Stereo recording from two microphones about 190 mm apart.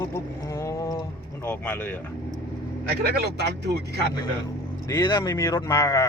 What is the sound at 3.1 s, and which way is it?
Speech, 60° right (ahead or behind).